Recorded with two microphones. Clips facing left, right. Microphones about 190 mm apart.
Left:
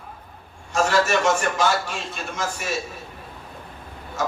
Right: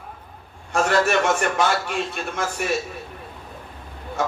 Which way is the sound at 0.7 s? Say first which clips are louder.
Right 1 dB; 60° right (ahead or behind).